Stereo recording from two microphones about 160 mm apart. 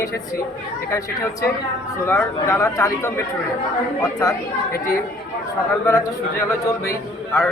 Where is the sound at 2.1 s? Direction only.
15° left (ahead or behind).